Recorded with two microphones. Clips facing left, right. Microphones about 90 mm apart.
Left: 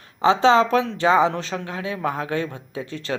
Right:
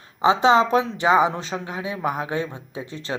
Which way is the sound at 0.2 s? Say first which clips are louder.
Left 1 dB; 15° right (ahead or behind).